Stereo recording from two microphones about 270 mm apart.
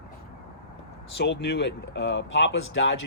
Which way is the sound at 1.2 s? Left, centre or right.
Left.